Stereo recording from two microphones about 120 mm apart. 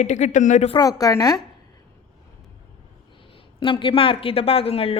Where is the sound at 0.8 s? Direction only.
30° left (ahead or behind).